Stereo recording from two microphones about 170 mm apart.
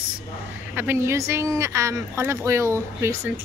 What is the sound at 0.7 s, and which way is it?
Speech, 15° right (ahead or behind).